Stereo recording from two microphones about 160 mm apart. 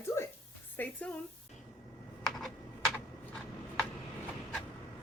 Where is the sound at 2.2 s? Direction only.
Centre (ahead or behind).